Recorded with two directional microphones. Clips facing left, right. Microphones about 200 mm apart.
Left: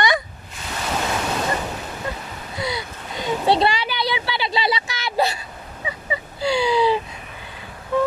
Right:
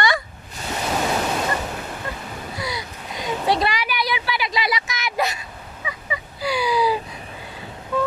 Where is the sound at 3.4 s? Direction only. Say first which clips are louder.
Left 3 dB; 30° left (ahead or behind).